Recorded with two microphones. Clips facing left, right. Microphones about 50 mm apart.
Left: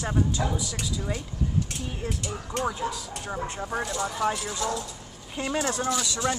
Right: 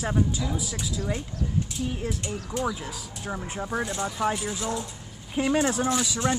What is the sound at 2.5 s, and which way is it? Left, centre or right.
Speech, left.